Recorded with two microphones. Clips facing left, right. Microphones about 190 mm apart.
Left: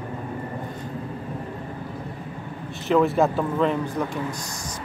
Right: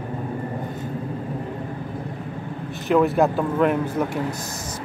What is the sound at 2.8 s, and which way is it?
Speech, centre (ahead or behind).